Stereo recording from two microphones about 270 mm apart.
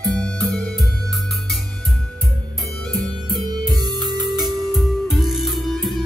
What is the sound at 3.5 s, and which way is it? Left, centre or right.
Music, centre.